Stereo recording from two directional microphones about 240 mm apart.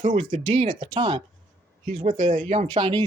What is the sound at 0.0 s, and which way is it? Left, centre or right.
Speech, right.